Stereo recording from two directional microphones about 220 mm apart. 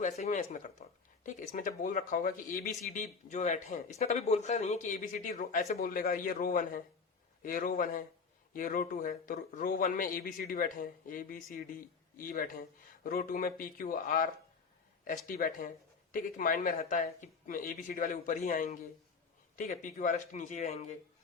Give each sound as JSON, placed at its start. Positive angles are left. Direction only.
{"t": 0.0, "sound": "speech", "side_deg": 35}